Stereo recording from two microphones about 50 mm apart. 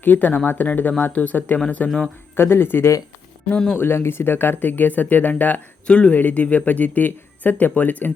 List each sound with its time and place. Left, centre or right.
0.0 s speech: left
2.3 s speech: left
5.9 s speech: left